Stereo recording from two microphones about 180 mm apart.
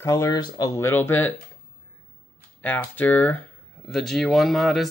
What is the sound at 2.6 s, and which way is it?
Speech, 10° left (ahead or behind).